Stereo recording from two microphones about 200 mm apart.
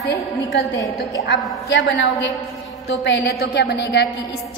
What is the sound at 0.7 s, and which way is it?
Speech, 15° left (ahead or behind).